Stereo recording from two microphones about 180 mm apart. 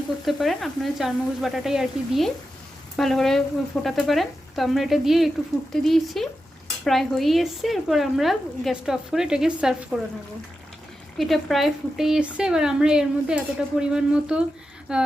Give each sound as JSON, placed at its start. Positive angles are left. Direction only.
{"t": 0.3, "sound": "speech", "side_deg": 0}
{"t": 11.2, "sound": "speech", "side_deg": 0}